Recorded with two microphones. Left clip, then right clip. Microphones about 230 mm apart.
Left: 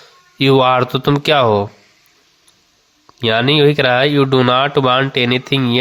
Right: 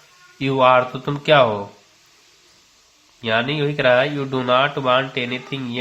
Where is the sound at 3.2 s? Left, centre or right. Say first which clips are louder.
Left 8 dB; left.